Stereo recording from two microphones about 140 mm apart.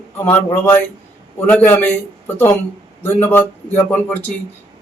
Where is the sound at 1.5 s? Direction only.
15° left (ahead or behind).